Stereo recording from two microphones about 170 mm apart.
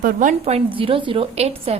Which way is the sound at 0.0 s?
55° right (ahead or behind).